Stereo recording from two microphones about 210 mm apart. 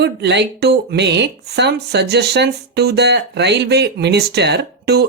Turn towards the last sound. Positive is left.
turn(degrees=-50)  # may be behind; listen again after turning